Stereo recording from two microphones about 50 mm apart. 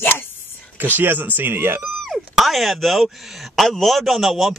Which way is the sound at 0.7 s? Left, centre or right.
Right.